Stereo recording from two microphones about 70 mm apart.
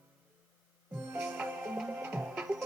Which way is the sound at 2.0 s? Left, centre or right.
Right.